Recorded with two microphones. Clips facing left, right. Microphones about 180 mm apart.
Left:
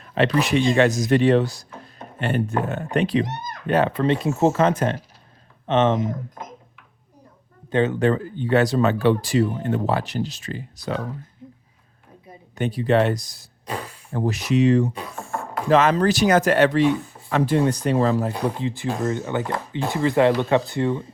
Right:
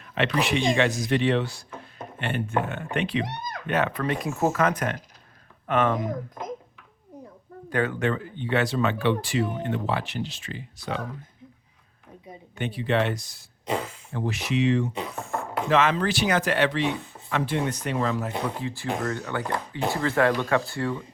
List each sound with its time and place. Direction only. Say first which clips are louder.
0.0 s speech: left 5 dB; 35° left (ahead or behind)
7.7 s speech: left 5 dB; 25° left (ahead or behind)
8.0 s speech: left 6 dB; 40° left (ahead or behind)
12.5 s speech: left 6 dB; 40° left (ahead or behind)
13.7 s throat clearing: right 3 dB; 20° right (ahead or behind)
14.1 s speech: left 6 dB; 40° left (ahead or behind)
14.9 s chopping: even; 20° right (ahead or behind)
15.7 s speech: left 5 dB; 40° left (ahead or behind)
18.4 s speech: left 5 dB; 20° left (ahead or behind)